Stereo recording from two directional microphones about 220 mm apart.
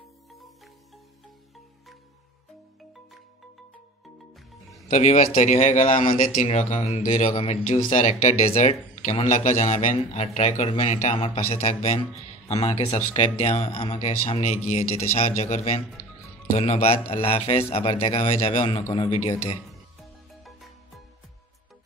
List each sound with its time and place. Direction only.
4.8 s a man's voice: 30° left (ahead or behind)